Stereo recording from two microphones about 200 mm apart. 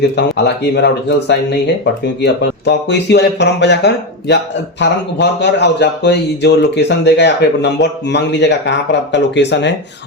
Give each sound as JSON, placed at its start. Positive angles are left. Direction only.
{"t": 0.2, "sound": "speech", "side_deg": 60}